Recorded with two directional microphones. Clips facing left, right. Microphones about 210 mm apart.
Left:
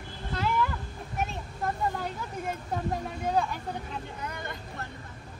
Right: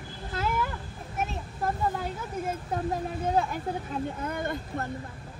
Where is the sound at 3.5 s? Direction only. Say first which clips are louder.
Right 4 dB; 45° right (ahead or behind).